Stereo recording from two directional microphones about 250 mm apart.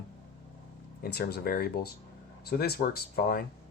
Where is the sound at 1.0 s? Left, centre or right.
Left.